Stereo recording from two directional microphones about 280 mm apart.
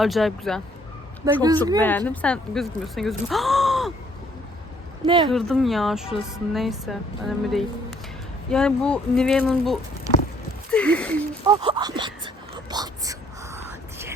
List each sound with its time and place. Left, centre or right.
0.0 s speech: centre
1.2 s speech: centre
1.8 s speech: centre
5.0 s speech: centre
5.3 s speech: centre
11.4 s speech: centre
12.7 s whispering: centre